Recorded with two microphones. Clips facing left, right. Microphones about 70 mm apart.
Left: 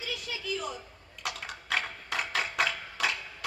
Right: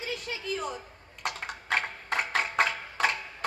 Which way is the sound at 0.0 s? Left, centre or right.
Right.